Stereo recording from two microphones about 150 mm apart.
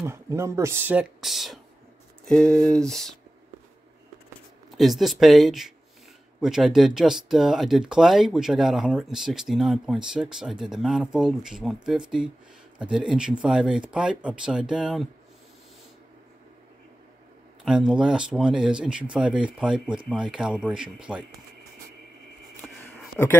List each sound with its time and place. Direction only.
0.0 s speech: 15° right (ahead or behind)
1.2 s speech: centre (ahead or behind)
4.6 s speech: centre (ahead or behind)
17.6 s speech: 5° right (ahead or behind)
22.6 s a sound: centre (ahead or behind)